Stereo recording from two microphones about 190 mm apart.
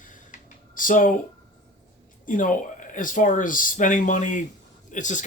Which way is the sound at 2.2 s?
45° left (ahead or behind).